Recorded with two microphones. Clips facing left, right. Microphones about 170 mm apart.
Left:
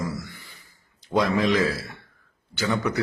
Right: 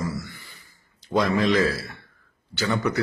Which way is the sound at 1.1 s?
15° left (ahead or behind).